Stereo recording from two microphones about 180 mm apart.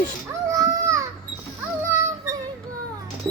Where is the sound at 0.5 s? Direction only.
20° right (ahead or behind).